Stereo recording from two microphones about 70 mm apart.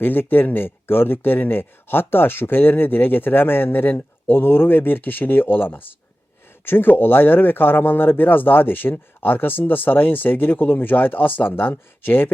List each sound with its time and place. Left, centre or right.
0.0 s speech: left